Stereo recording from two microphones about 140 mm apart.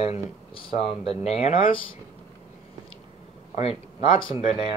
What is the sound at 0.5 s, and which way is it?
Speech, 40° left (ahead or behind).